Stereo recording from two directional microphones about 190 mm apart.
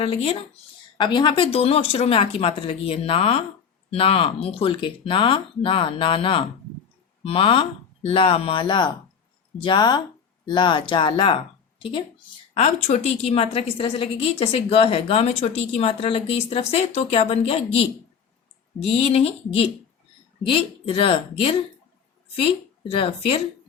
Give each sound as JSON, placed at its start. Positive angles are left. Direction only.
{"t": 0.0, "sound": "a woman's voice", "side_deg": 30}
{"t": 18.9, "sound": "a woman's voice", "side_deg": 30}